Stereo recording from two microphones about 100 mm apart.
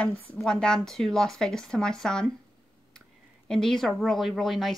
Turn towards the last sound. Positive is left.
turn(degrees=0)  # may be behind; listen again after turning